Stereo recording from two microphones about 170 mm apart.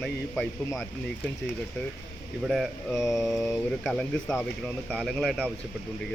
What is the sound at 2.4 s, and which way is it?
Speech, centre (ahead or behind).